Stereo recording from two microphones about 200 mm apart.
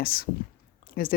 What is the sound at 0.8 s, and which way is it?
Chewing, 45° left (ahead or behind).